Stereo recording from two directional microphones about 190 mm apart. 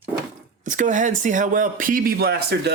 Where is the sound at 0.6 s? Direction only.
40° right (ahead or behind).